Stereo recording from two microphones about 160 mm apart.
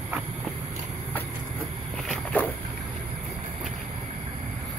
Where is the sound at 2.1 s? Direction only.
10° left (ahead or behind).